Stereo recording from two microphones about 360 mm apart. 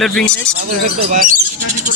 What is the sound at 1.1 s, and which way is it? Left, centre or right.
Owl, right.